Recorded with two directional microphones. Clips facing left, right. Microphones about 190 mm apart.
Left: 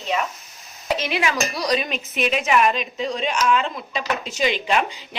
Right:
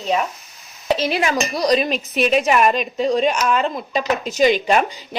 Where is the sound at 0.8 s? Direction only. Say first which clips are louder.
Right 4 dB; 35° right (ahead or behind).